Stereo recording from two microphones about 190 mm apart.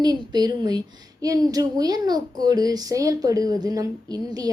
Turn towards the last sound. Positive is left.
turn(degrees=-20)  # may be behind; listen again after turning